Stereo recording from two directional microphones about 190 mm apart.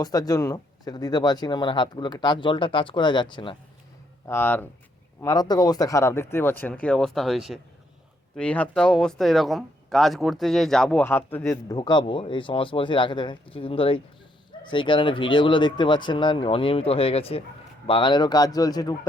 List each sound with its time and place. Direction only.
0.0 s speech: 20° left (ahead or behind)
4.3 s speech: 10° left (ahead or behind)